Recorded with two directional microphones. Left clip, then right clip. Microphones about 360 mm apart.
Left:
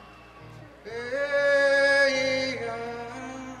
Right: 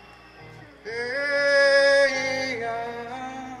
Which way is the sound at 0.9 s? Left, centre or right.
Right.